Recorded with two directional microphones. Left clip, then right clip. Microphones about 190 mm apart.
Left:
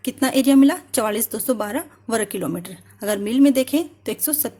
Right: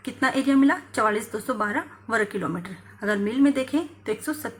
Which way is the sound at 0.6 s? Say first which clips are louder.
Left 2 dB; 90° left.